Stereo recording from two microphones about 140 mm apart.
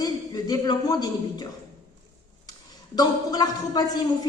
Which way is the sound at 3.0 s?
25° left (ahead or behind).